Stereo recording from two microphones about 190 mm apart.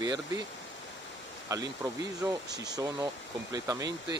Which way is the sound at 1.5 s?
20° right (ahead or behind).